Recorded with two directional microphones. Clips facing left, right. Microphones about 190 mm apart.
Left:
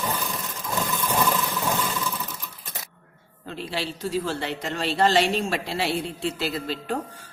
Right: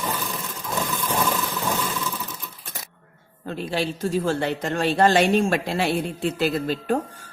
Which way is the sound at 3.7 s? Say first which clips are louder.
Right 4 dB; 45° right (ahead or behind).